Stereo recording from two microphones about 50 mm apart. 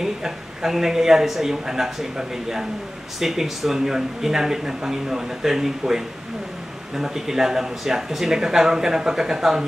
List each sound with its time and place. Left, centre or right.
0.0 s speech: centre